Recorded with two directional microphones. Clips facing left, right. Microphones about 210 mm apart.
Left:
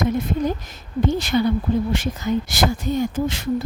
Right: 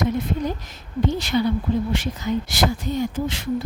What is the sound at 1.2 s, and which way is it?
Speech, 50° left (ahead or behind).